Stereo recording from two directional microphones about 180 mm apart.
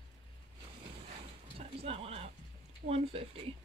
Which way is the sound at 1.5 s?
35° right (ahead or behind).